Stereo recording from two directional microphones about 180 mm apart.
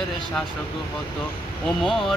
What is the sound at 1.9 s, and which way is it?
Speech, centre (ahead or behind).